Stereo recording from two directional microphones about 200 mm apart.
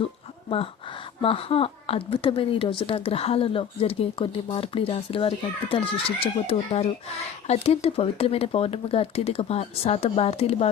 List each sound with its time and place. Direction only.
1.2 s a woman's voice: 30° left (ahead or behind)